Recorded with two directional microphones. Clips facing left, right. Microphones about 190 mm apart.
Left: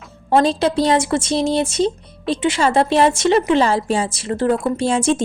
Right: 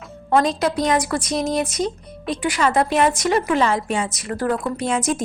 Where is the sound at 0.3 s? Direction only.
30° left (ahead or behind).